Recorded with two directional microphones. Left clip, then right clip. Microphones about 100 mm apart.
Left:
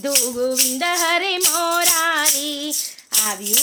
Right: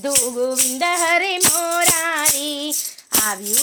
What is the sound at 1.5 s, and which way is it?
Music, 15° left (ahead or behind).